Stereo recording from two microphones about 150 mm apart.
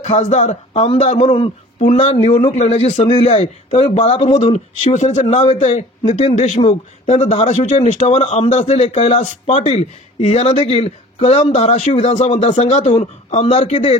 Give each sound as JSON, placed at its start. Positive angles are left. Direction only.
{"t": 0.0, "sound": "speech", "side_deg": 50}